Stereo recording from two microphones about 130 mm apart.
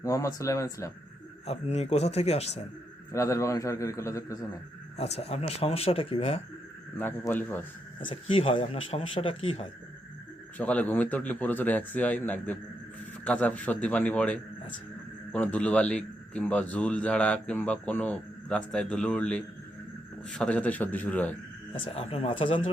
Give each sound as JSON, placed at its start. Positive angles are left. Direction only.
{"t": 0.0, "sound": "a man's voice", "side_deg": 25}
{"t": 1.5, "sound": "a man's voice", "side_deg": 55}
{"t": 3.1, "sound": "a man's voice", "side_deg": 25}
{"t": 4.9, "sound": "speech", "side_deg": 55}
{"t": 6.9, "sound": "a man's voice", "side_deg": 15}
{"t": 8.1, "sound": "speech", "side_deg": 45}
{"t": 10.6, "sound": "a man's voice", "side_deg": 10}
{"t": 21.7, "sound": "speech", "side_deg": 50}